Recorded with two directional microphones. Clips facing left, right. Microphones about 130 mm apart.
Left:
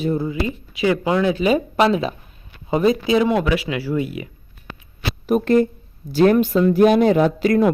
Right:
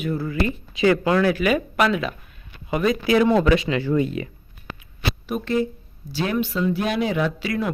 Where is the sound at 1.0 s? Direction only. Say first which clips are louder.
Left 1 dB; 20° left (ahead or behind).